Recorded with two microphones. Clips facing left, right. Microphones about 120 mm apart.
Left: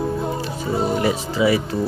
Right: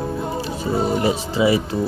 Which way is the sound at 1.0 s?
25° right (ahead or behind).